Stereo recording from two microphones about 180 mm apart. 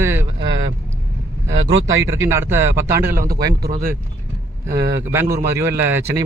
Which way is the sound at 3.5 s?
60° right (ahead or behind).